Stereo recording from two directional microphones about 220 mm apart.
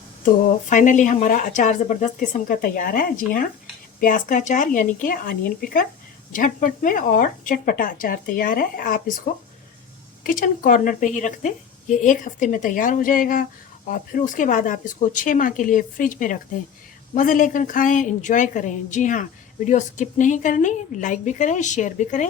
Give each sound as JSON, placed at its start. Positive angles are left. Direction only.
{"t": 0.7, "sound": "a woman's voice", "side_deg": 35}